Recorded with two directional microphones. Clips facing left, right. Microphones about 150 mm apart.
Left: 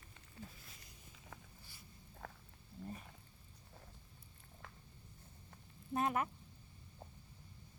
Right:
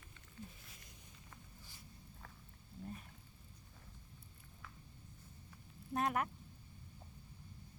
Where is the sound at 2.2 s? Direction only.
75° left (ahead or behind).